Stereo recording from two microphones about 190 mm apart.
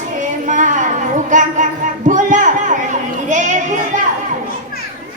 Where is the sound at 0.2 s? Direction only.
40° right (ahead or behind).